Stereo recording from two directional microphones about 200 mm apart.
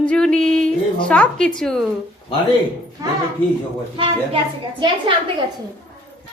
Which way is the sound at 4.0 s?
25° right (ahead or behind).